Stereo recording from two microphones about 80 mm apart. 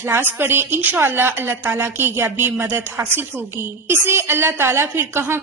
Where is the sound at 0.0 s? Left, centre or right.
Right.